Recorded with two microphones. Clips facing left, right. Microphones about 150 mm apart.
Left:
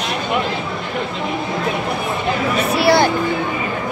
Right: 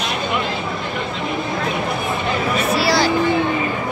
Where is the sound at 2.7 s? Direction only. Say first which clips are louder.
Left 5 dB; 55° left (ahead or behind).